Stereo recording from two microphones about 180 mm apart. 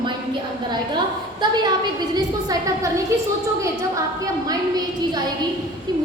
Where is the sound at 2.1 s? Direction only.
20° right (ahead or behind).